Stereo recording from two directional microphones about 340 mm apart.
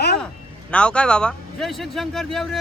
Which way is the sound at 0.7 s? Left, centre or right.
Centre.